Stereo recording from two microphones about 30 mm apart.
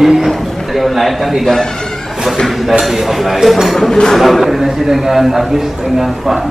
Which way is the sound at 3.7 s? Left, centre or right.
Centre.